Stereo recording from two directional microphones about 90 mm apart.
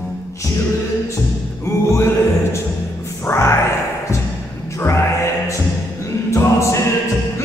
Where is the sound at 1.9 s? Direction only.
30° left (ahead or behind).